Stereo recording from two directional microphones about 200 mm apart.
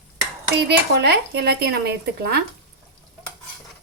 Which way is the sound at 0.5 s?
55° right (ahead or behind).